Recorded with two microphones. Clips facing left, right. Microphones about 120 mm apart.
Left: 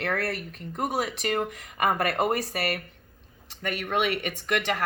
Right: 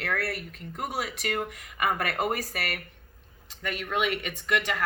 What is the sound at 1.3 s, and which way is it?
Speech, 40° left (ahead or behind).